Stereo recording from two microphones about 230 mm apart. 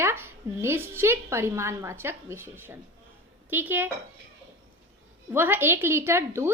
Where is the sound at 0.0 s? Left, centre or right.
Centre.